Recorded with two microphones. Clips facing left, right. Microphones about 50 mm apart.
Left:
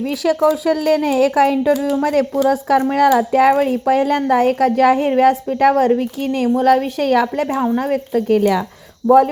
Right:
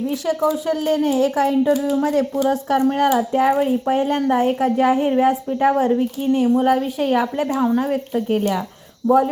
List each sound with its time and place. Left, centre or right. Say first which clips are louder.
0.0 s speech: left 4 dB; left
1.6 s a woman's voice: left 2 dB; left
7.8 s speech: left 3 dB; left
9.0 s speech: left 5 dB; left